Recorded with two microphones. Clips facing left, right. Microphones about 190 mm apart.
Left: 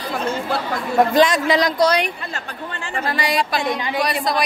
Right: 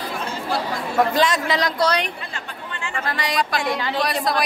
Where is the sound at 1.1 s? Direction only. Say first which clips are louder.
Left 5 dB; 15° left (ahead or behind).